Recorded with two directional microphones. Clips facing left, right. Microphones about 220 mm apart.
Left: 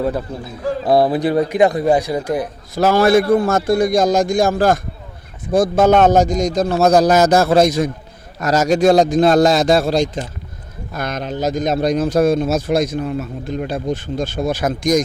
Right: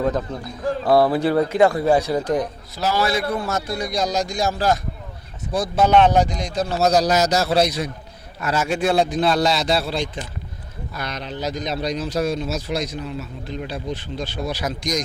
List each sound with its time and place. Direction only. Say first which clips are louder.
0.0 s a man's voice: left 2 dB; 10° left (ahead or behind)
2.7 s a man's voice: left 9 dB; 50° left (ahead or behind)